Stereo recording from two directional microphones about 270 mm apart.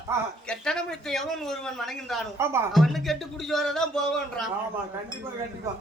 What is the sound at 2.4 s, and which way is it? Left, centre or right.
A woman's voice, centre.